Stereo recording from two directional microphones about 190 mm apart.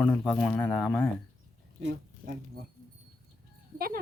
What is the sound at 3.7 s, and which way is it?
Sheep, 50° right (ahead or behind).